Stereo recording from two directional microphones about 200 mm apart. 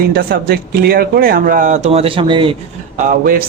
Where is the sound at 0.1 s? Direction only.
50° right (ahead or behind); by 2.6 s 25° right (ahead or behind).